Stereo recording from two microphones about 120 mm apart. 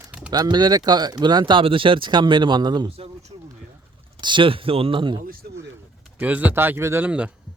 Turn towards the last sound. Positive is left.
turn(degrees=-10)  # may be behind; listen again after turning